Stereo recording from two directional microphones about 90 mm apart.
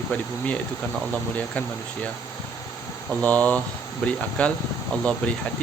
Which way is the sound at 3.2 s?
15° left (ahead or behind).